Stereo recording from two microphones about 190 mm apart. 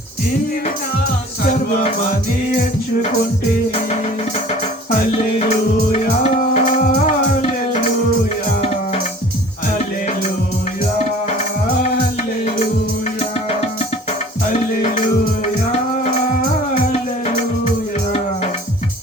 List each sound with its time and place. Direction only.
5.5 s music: 35° left (ahead or behind)